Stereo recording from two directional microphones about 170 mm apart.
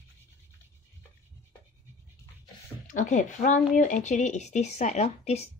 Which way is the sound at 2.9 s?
45° left (ahead or behind).